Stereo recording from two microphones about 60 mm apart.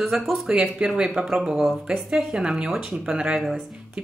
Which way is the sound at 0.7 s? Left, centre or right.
Centre.